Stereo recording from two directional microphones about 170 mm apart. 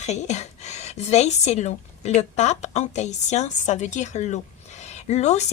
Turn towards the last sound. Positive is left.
turn(degrees=40)  # may be behind; listen again after turning